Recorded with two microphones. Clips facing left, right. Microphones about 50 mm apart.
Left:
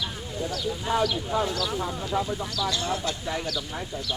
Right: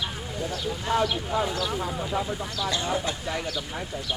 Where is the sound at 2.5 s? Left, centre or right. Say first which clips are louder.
Right 1 dB; right.